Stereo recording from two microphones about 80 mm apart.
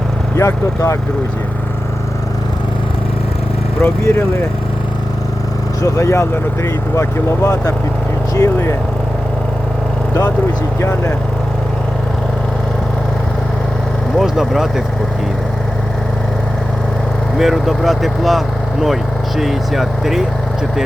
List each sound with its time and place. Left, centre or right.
0.3 s speech: left
3.8 s speech: left
5.8 s speech: left
10.8 s speech: left
14.2 s speech: centre
17.3 s speech: centre